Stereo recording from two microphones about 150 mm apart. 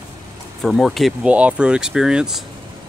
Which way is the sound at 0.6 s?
Centre (ahead or behind).